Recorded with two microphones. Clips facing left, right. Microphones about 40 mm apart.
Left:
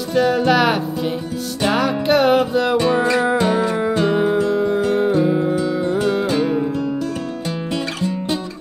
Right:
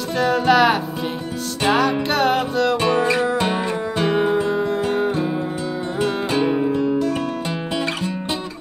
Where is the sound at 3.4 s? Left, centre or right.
Centre.